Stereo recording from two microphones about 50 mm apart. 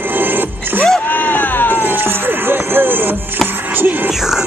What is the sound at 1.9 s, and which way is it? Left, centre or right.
Music, right.